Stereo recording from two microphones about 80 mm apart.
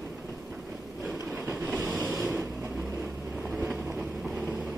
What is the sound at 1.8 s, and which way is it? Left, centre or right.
Ocean, centre.